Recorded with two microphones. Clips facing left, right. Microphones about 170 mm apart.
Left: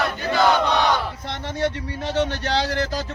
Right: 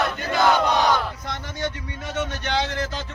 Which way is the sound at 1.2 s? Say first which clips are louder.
Left 4 dB; 30° left (ahead or behind).